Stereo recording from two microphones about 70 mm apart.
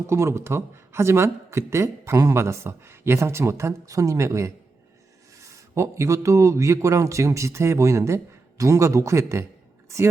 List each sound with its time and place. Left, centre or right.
0.1 s speech: right